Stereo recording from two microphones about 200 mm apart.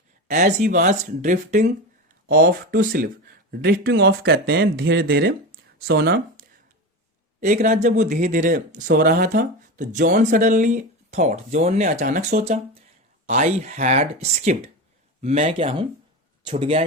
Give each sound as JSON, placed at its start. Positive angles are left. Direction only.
{"t": 0.3, "sound": "speech", "side_deg": -40}
{"t": 7.4, "sound": "speech", "side_deg": -40}